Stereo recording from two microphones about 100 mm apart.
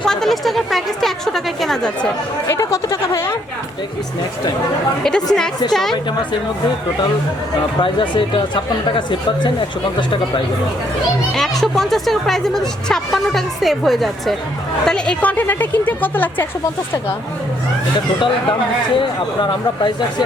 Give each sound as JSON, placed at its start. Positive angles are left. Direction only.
{"t": 0.0, "sound": "speech", "side_deg": 5}
{"t": 2.5, "sound": "a sound", "side_deg": 30}
{"t": 5.0, "sound": "speech", "side_deg": 5}
{"t": 7.8, "sound": "speech", "side_deg": 55}
{"t": 11.3, "sound": "speech", "side_deg": 5}
{"t": 18.9, "sound": "speech", "side_deg": 50}